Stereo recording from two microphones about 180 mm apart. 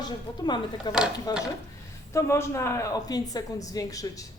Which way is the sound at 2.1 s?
15° left (ahead or behind).